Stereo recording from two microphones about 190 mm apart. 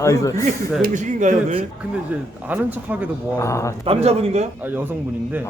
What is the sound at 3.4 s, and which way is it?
Speech, 15° left (ahead or behind).